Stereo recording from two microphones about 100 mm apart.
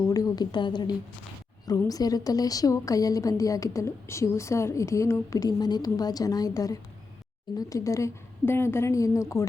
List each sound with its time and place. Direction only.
0.1 s a woman's voice: 40° left (ahead or behind)